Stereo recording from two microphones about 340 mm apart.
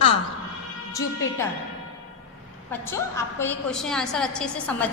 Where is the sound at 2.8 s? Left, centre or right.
Centre.